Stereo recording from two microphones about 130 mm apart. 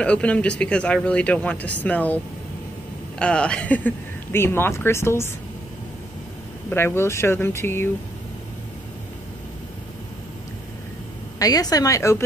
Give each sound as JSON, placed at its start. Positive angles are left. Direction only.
{"t": 0.0, "sound": "speech", "side_deg": 10}
{"t": 3.2, "sound": "speech", "side_deg": 10}
{"t": 6.7, "sound": "speech", "side_deg": 20}
{"t": 11.3, "sound": "speech", "side_deg": 30}